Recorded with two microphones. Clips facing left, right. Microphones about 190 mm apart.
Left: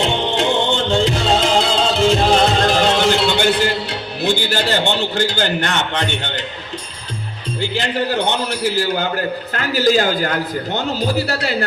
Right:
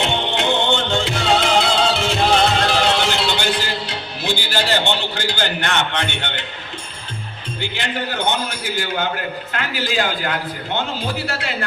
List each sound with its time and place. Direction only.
0.2 s music: 35° left (ahead or behind); by 3.8 s 55° left (ahead or behind)
4.2 s a sound: 50° left (ahead or behind)
7.7 s a man's voice: 35° left (ahead or behind)